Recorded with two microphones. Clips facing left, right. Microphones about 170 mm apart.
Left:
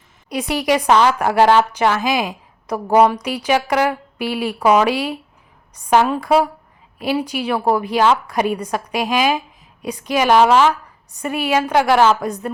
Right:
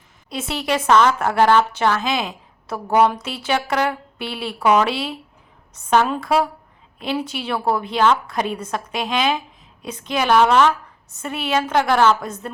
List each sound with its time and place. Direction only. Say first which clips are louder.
0.3 s a woman's voice: left 5 dB; 15° left (ahead or behind)